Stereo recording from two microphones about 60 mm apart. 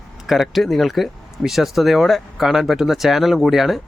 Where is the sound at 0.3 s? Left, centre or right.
Centre.